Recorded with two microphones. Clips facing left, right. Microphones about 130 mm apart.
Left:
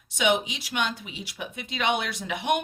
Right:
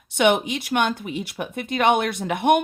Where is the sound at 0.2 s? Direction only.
55° right (ahead or behind).